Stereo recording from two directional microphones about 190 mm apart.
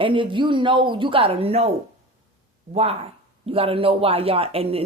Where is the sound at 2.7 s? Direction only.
30° right (ahead or behind).